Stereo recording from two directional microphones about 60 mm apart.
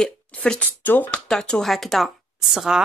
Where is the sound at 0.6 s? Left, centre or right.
Left.